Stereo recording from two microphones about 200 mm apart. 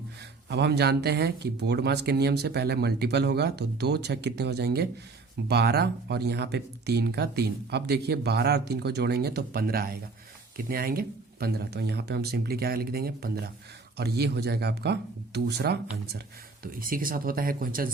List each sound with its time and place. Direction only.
0.4 s speech: 55° right (ahead or behind)
16.8 s speech: 45° right (ahead or behind)